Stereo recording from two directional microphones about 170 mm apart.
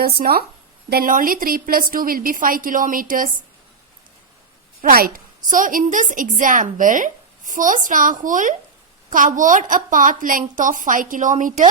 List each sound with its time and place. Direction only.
0.0 s a woman's voice: 65° right (ahead or behind)
4.8 s a woman's voice: 60° right (ahead or behind)